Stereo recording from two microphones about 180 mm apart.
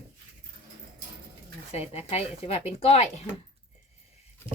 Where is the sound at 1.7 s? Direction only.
35° left (ahead or behind).